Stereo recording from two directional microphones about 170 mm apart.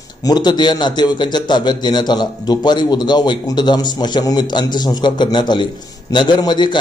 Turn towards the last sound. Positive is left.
turn(degrees=25)  # may be behind; listen again after turning